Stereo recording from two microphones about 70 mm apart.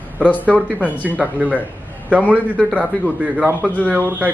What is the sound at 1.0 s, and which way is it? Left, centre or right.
A man's voice, right.